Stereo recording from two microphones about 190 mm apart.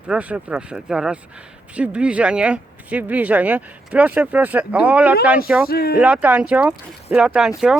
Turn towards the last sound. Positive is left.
turn(degrees=0)  # may be behind; listen again after turning